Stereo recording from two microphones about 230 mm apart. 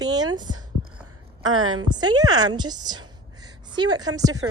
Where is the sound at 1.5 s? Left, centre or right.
Right.